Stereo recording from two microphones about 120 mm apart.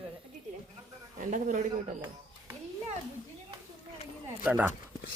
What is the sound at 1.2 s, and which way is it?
Speech, 90° right.